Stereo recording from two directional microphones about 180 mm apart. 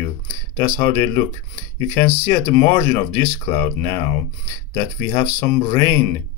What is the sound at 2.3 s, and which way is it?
Speech, 15° left (ahead or behind).